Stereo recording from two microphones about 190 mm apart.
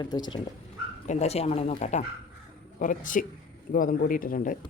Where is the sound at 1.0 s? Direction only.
35° left (ahead or behind).